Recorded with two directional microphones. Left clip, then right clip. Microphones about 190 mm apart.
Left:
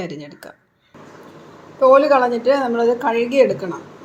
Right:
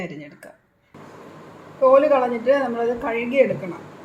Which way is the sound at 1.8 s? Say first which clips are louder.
Left 3 dB; 45° left (ahead or behind).